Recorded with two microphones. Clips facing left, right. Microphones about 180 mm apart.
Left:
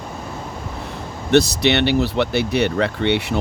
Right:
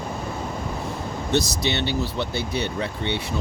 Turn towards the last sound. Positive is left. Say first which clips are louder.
# left 7 dB
turn(degrees=70)  # may be behind; listen again after turning